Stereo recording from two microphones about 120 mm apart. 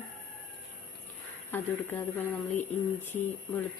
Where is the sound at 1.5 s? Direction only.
15° left (ahead or behind).